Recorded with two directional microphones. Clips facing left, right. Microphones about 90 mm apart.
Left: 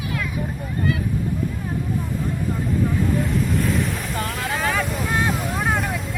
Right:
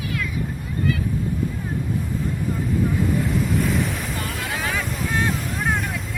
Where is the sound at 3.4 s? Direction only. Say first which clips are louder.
Even; centre (ahead or behind).